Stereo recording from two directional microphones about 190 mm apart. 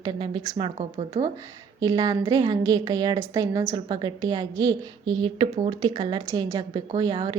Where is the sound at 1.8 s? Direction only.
20° right (ahead or behind).